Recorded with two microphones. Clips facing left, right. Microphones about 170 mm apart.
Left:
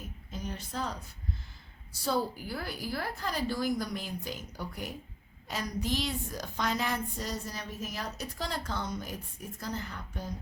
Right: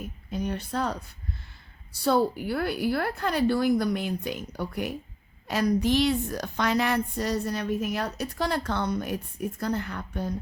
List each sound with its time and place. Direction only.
0.3 s a woman's voice: 65° right (ahead or behind)